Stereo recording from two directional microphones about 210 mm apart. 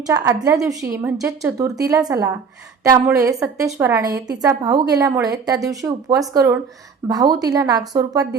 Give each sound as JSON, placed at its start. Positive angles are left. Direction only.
{"t": 0.0, "sound": "a woman's voice", "side_deg": -15}